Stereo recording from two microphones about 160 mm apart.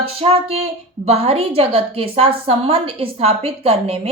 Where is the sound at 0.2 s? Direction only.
40° right (ahead or behind).